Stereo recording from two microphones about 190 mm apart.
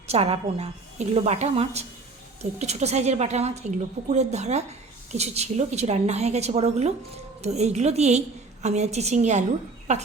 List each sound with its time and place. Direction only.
0.1 s a woman's voice: 35° right (ahead or behind)